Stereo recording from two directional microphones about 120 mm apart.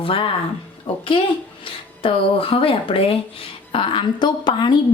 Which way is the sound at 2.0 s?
50° left (ahead or behind).